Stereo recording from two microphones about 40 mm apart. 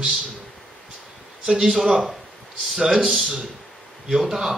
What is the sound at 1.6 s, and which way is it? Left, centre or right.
Speech, centre.